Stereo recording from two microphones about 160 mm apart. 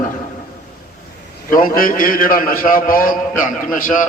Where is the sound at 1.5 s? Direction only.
60° left (ahead or behind).